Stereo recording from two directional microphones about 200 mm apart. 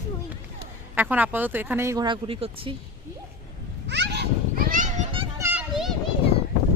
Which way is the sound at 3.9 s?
60° right (ahead or behind).